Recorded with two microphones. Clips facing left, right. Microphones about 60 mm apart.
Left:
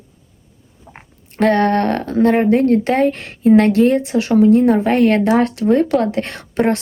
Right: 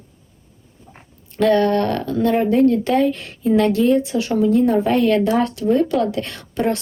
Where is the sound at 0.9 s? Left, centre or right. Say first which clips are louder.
Left 1 dB; left.